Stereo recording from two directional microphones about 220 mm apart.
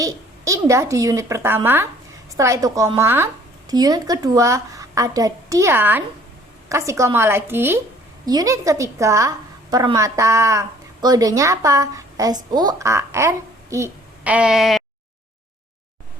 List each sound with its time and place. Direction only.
0.0 s a woman's voice: 15° right (ahead or behind)